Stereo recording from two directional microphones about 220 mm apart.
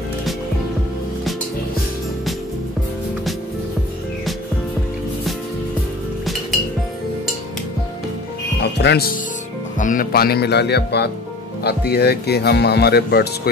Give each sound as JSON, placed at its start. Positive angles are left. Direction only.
{"t": 8.7, "sound": "speech", "side_deg": 50}
{"t": 9.8, "sound": "speech", "side_deg": 35}